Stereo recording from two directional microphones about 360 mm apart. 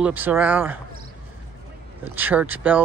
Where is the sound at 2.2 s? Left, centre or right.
Centre.